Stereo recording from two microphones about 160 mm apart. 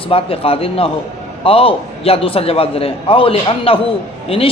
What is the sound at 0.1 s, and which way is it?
A man's voice, 35° left (ahead or behind).